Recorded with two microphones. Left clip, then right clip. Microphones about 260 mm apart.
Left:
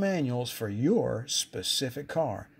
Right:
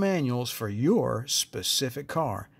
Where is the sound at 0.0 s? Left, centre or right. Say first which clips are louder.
Right 2 dB; right.